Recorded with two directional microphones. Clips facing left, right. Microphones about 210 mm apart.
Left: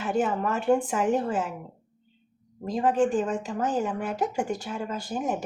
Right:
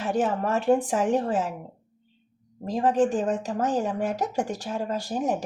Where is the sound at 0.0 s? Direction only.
35° right (ahead or behind).